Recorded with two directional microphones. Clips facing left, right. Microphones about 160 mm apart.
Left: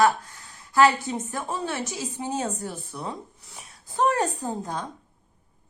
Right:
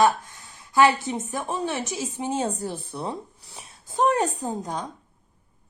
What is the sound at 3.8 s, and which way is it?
A woman's voice, 20° right (ahead or behind).